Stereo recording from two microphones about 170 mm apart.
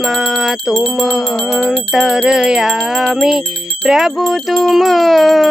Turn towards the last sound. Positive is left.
turn(degrees=0)  # may be behind; listen again after turning